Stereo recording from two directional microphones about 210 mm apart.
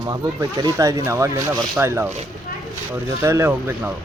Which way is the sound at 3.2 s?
10° right (ahead or behind).